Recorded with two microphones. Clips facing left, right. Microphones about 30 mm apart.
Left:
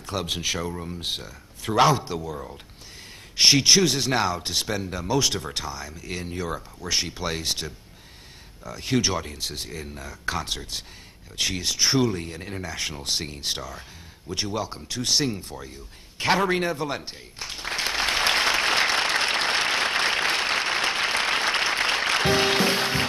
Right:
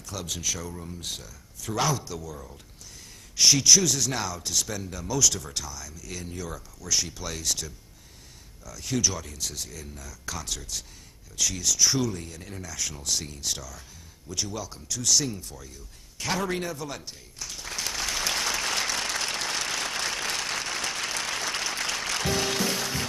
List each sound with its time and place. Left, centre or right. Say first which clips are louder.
0.0 s speech: left 5 dB; left
16.2 s applause: left 7 dB; left